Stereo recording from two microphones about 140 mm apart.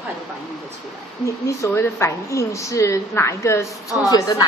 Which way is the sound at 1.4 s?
20° left (ahead or behind).